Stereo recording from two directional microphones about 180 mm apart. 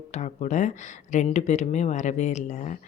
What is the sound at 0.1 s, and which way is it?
Speech, 40° left (ahead or behind).